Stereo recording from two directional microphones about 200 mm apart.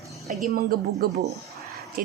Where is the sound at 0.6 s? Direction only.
50° right (ahead or behind).